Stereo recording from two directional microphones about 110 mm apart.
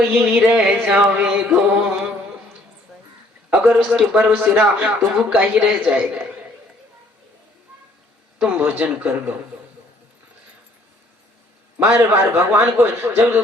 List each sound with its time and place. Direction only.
0.1 s a man's voice: 15° right (ahead or behind)
1.6 s a sound: 5° right (ahead or behind)
3.7 s a man's voice: 10° right (ahead or behind)
8.4 s a man's voice: 15° right (ahead or behind)
11.8 s a man's voice: 20° right (ahead or behind)